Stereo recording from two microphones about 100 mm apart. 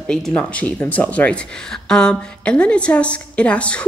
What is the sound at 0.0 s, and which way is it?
Speech, 10° left (ahead or behind).